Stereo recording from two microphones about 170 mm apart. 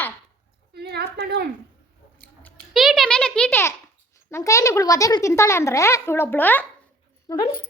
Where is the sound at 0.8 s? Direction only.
70° right (ahead or behind).